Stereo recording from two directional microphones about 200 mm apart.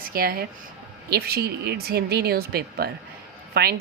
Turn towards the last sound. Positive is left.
turn(degrees=-50)  # may be behind; listen again after turning